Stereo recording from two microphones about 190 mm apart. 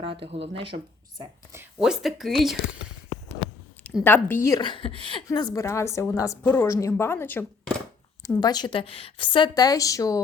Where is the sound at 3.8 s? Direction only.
10° left (ahead or behind).